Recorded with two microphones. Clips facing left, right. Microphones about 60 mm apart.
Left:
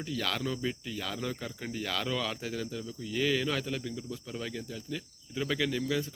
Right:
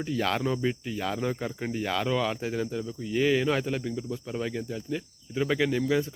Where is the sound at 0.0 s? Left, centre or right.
Right.